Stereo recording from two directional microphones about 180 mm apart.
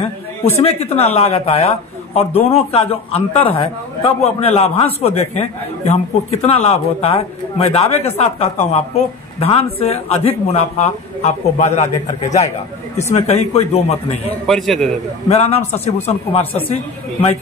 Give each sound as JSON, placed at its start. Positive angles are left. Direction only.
{"t": 0.5, "sound": "speech", "side_deg": 35}
{"t": 14.4, "sound": "a man's voice", "side_deg": 0}
{"t": 15.2, "sound": "speech", "side_deg": 35}